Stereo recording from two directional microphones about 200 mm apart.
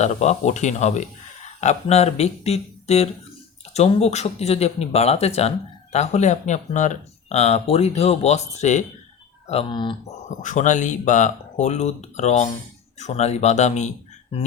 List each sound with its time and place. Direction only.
0.0 s speech: 35° left (ahead or behind)
10.2 s speech: 40° left (ahead or behind)